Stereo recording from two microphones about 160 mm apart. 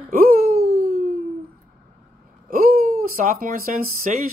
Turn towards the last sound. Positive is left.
turn(degrees=-60)  # may be behind; listen again after turning